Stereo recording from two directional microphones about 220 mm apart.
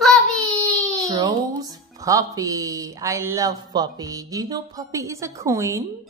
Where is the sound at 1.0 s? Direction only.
15° right (ahead or behind).